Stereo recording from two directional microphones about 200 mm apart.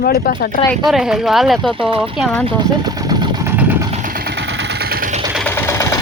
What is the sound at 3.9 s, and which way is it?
Vehicle, 45° right (ahead or behind).